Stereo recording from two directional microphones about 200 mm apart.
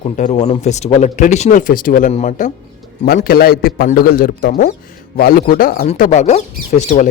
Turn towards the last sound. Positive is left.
turn(degrees=35)  # may be behind; listen again after turning